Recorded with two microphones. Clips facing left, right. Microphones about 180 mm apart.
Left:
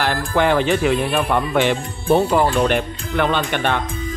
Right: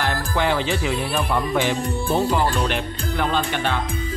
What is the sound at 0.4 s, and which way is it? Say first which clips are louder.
Speech: left 6 dB; 55° left (ahead or behind).